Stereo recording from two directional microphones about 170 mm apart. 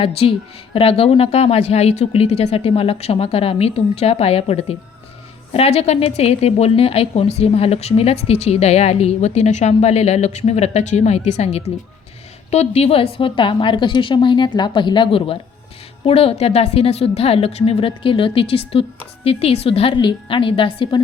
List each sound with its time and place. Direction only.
0.0 s a woman's voice: 30° left (ahead or behind)